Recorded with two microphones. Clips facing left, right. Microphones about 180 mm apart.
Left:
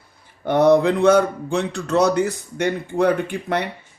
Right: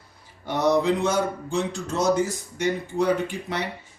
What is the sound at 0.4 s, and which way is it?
Speech, 55° left (ahead or behind).